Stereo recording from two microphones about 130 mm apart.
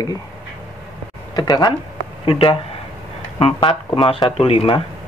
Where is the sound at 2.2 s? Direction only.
45° left (ahead or behind).